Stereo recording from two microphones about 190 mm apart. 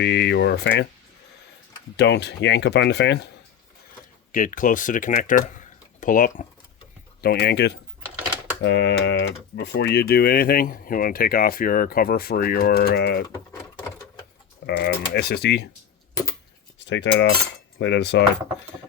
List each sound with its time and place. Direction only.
0.0 s speech: 60° left (ahead or behind)
2.0 s speech: 65° left (ahead or behind)
4.3 s speech: 45° left (ahead or behind)
7.2 s speech: 55° left (ahead or behind)
14.7 s speech: 55° left (ahead or behind)
16.8 s cutlery: 65° left (ahead or behind)
17.7 s speech: 60° left (ahead or behind)